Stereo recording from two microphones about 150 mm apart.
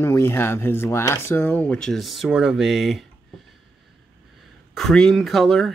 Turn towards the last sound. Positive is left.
turn(degrees=0)  # may be behind; listen again after turning